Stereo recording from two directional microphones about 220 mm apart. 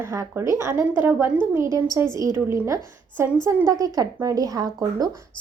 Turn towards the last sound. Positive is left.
turn(degrees=-15)  # may be behind; listen again after turning